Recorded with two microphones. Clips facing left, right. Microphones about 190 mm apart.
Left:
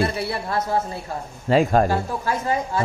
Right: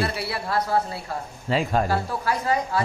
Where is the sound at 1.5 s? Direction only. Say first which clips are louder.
Left 6 dB; 45° left (ahead or behind).